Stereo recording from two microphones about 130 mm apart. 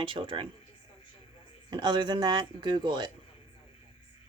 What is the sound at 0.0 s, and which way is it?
Speech, 40° right (ahead or behind).